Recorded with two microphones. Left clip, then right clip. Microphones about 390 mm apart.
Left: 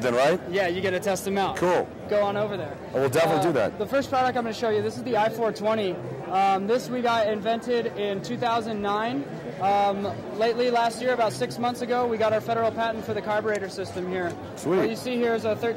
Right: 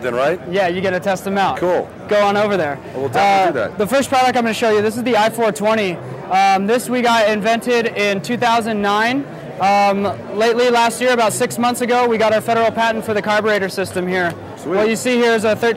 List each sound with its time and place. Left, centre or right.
0.0 s a man's voice: left
0.5 s speech: right
1.5 s a man's voice: left
2.0 s a man's voice: right
3.8 s speech: right